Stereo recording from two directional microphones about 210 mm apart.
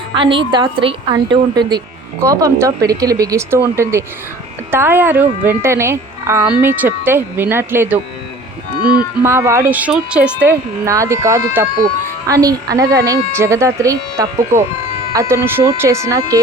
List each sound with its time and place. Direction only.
0.1 s a woman's voice: 25° right (ahead or behind)
9.2 s speech: 10° right (ahead or behind)